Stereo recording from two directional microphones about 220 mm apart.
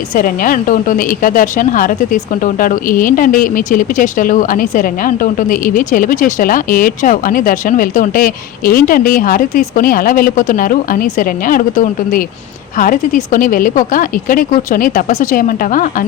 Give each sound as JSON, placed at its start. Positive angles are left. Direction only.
{"t": 0.1, "sound": "a woman's voice", "side_deg": 40}